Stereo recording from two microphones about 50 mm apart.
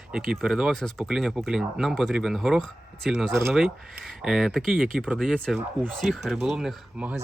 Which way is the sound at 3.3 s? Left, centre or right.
Right.